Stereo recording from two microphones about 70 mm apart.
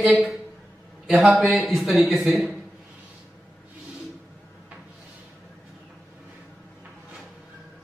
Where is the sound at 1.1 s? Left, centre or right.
Centre.